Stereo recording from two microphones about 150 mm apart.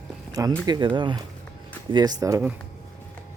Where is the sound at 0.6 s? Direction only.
30° right (ahead or behind).